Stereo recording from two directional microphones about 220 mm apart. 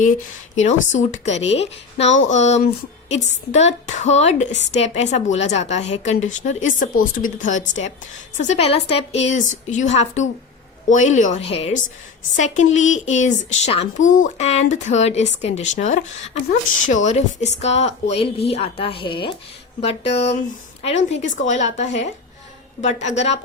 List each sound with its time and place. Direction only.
0.5 s a woman's voice: 35° left (ahead or behind)
23.1 s a woman's voice: 30° left (ahead or behind)